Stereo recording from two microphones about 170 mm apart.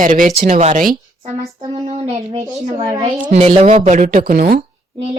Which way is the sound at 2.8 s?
20° right (ahead or behind).